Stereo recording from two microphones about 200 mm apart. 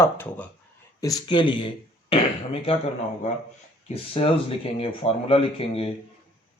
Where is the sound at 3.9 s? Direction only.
30° left (ahead or behind).